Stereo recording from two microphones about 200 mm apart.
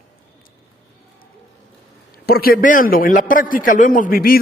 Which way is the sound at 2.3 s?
50° left (ahead or behind).